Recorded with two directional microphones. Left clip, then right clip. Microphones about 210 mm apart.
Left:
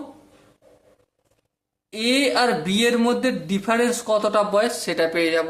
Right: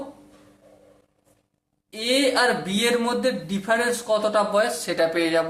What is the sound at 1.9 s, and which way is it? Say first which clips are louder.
Speech: left 1 dB; 35° left (ahead or behind).